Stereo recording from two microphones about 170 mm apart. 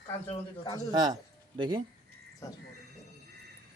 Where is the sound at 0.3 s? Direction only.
25° left (ahead or behind).